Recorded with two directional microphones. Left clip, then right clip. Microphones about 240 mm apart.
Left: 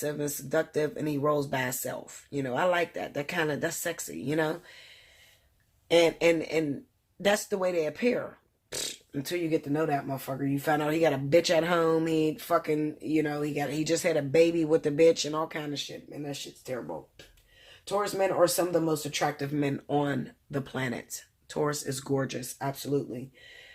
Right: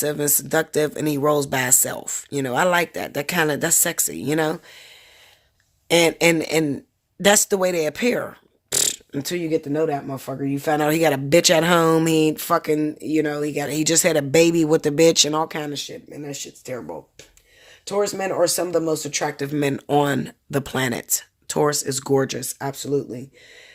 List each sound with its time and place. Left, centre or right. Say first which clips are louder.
0.0 s speech: right 9 dB; right
17.8 s speech: right 5 dB; right